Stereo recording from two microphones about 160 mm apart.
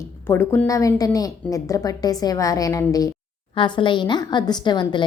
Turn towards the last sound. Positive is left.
turn(degrees=30)  # may be behind; listen again after turning